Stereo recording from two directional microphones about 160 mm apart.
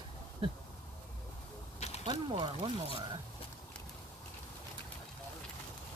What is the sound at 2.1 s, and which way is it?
Speech, 30° right (ahead or behind).